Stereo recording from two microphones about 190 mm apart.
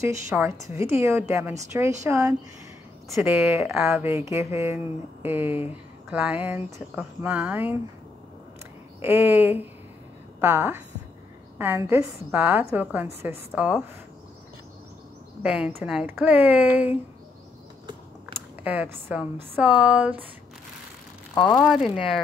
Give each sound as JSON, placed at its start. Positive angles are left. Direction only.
{"t": 0.0, "sound": "speech", "side_deg": -15}
{"t": 3.7, "sound": "speech", "side_deg": 0}
{"t": 4.0, "sound": "speech", "side_deg": -15}
{"t": 9.0, "sound": "speech", "side_deg": -10}
{"t": 15.4, "sound": "speech", "side_deg": -5}
{"t": 18.6, "sound": "speech", "side_deg": -10}
{"t": 21.5, "sound": "speech", "side_deg": 0}